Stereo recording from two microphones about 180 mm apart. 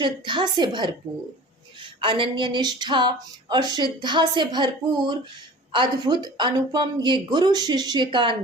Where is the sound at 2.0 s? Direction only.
30° right (ahead or behind).